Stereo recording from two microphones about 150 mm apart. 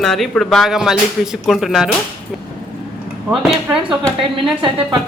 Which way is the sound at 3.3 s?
5° right (ahead or behind).